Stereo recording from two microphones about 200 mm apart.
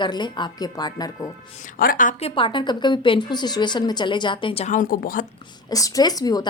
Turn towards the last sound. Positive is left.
turn(degrees=20)  # may be behind; listen again after turning